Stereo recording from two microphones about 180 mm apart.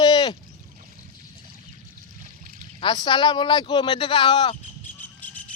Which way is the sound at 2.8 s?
25° left (ahead or behind).